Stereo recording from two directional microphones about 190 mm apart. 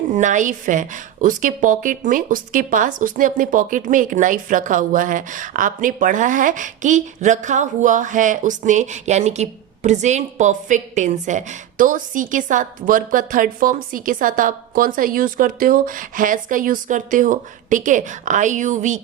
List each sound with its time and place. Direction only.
0.1 s a woman's voice: 40° right (ahead or behind)